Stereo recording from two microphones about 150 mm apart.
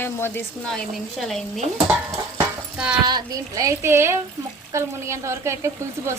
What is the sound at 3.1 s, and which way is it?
A woman's voice, 25° right (ahead or behind).